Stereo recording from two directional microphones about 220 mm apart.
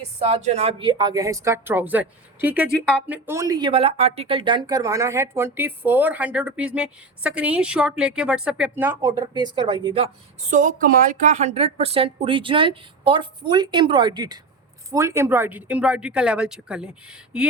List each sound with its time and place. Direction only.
0.2 s a woman's voice: 30° right (ahead or behind)
10.5 s a woman's voice: 35° right (ahead or behind); by 17.4 s 5° right (ahead or behind)